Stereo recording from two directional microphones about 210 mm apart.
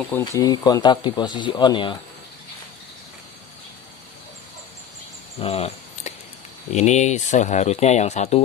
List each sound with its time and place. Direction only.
0.2 s speech: 20° left (ahead or behind)
5.4 s a sound: 30° left (ahead or behind)
6.7 s speech: 35° left (ahead or behind)